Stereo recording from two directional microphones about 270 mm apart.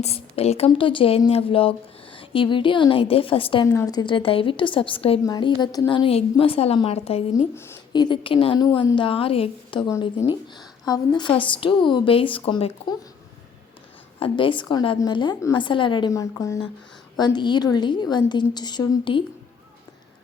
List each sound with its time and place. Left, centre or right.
0.0 s a woman's voice: left
14.2 s a woman's voice: centre